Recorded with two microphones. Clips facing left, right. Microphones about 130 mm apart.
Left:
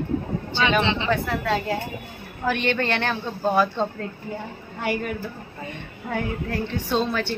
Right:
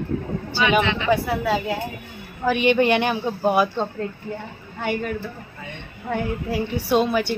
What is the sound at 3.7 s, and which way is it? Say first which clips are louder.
Speech: right 1 dB; centre (ahead or behind).